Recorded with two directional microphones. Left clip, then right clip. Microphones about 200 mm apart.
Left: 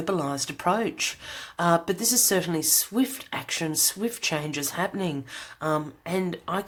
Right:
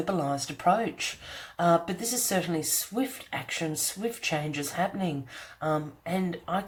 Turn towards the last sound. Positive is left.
turn(degrees=40)  # may be behind; listen again after turning